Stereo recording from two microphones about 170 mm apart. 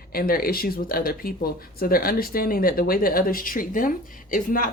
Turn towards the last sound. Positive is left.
turn(degrees=55)  # may be behind; listen again after turning